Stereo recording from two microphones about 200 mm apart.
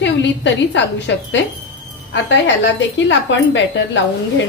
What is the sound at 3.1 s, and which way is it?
Speech, 65° left (ahead or behind).